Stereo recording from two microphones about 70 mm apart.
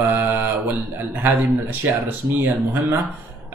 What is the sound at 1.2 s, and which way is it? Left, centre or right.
Speech, right.